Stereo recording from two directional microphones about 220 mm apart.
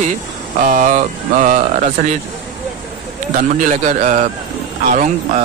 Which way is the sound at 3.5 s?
35° right (ahead or behind).